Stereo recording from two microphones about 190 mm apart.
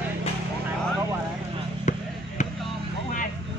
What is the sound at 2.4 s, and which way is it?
Vehicle, 40° left (ahead or behind).